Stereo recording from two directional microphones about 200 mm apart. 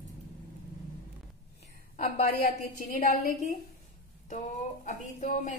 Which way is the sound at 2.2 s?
45° left (ahead or behind).